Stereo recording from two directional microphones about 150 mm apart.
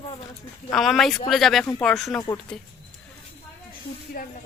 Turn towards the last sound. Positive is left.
turn(degrees=70)  # may be behind; listen again after turning